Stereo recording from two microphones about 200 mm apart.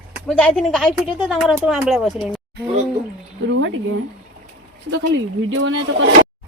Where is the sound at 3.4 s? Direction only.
70° right (ahead or behind).